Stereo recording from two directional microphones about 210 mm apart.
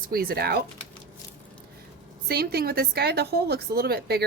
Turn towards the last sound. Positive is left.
turn(degrees=-50)  # may be behind; listen again after turning